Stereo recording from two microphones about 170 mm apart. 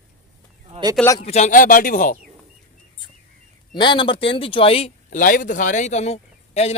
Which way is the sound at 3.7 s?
25° left (ahead or behind).